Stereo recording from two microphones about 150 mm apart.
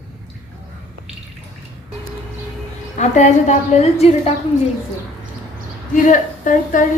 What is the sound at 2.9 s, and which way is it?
A woman's voice, 50° left (ahead or behind).